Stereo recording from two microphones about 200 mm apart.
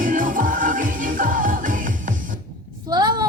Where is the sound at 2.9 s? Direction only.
20° right (ahead or behind).